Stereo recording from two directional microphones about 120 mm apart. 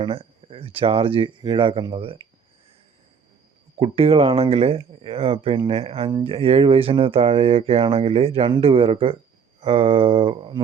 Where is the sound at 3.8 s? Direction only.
55° right (ahead or behind).